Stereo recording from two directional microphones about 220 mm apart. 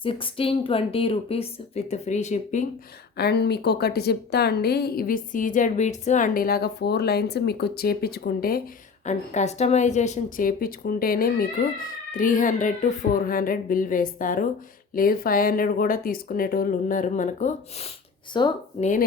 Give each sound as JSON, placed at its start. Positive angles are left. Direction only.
{"t": 0.0, "sound": "speech", "side_deg": 25}
{"t": 3.2, "sound": "a woman's voice", "side_deg": 50}